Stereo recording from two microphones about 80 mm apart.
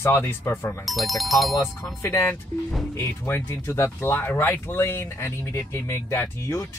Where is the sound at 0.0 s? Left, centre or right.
Left.